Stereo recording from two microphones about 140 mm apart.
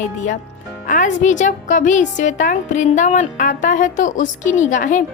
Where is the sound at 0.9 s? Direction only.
65° left (ahead or behind).